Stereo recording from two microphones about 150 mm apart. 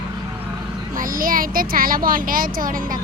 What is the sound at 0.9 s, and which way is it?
A child's voice, 70° right (ahead or behind).